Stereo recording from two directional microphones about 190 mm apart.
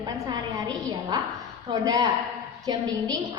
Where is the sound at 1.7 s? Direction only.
20° right (ahead or behind).